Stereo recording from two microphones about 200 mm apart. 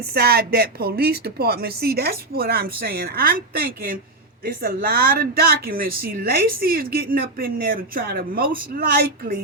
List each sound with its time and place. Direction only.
0.0 s speech: 50° right (ahead or behind)